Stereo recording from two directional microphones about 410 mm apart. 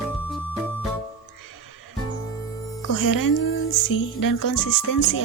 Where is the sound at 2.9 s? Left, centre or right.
Left.